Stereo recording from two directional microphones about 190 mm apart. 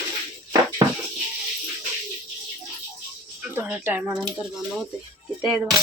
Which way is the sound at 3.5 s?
10° right (ahead or behind).